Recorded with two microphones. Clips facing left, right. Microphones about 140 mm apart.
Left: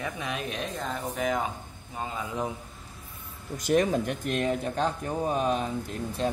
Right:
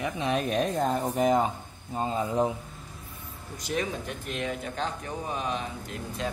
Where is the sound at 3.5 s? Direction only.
50° left (ahead or behind).